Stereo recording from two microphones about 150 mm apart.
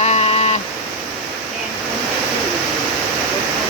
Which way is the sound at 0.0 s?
45° left (ahead or behind).